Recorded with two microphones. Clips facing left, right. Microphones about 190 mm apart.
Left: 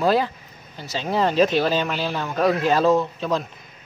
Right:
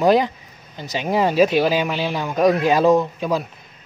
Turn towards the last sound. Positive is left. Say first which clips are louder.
# right 2 dB
turn(degrees=-10)  # may be behind; listen again after turning